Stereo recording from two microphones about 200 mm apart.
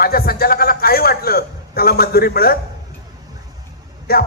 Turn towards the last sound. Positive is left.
turn(degrees=50)  # may be behind; listen again after turning